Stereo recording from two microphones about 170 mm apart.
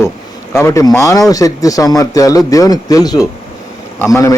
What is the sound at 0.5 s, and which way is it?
A man's voice, 15° left (ahead or behind).